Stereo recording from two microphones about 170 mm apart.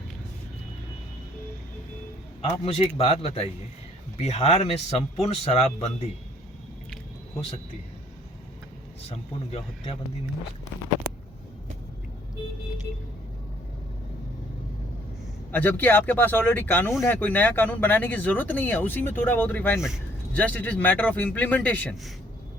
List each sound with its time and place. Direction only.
2.6 s speech: 35° left (ahead or behind)
9.0 s speech: 35° left (ahead or behind)
15.5 s speech: 10° left (ahead or behind)